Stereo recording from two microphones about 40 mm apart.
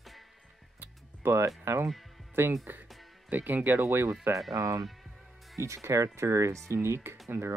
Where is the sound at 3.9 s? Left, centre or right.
Right.